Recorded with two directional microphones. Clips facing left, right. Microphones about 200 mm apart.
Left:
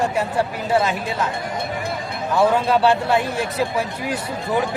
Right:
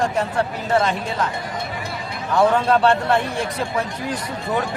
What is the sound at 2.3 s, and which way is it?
Speech, 5° left (ahead or behind).